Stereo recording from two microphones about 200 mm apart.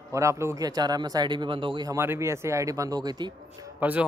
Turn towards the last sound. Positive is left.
turn(degrees=-5)  # may be behind; listen again after turning